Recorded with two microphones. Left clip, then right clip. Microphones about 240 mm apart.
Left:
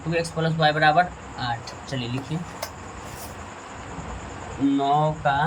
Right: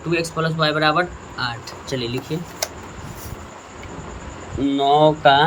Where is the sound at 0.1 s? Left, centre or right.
Centre.